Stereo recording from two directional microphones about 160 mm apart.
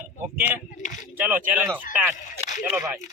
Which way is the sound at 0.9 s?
50° left (ahead or behind).